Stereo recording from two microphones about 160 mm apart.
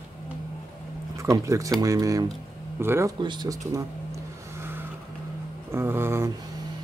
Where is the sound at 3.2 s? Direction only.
25° right (ahead or behind).